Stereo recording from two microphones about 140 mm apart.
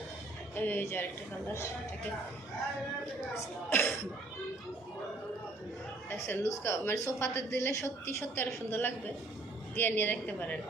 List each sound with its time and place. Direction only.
0.5 s a woman's voice: 15° left (ahead or behind)
3.3 s a woman's voice: 15° left (ahead or behind)
6.1 s a woman's voice: 15° left (ahead or behind)